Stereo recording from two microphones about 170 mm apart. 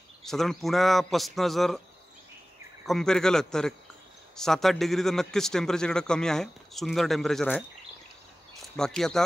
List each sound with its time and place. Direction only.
0.2 s a man's voice: centre (ahead or behind)
2.9 s a man's voice: 5° left (ahead or behind)
8.7 s a man's voice: 5° left (ahead or behind)